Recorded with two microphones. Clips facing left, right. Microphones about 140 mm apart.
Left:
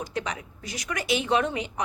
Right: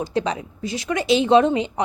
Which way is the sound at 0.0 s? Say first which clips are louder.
Right 8 dB; 30° right (ahead or behind).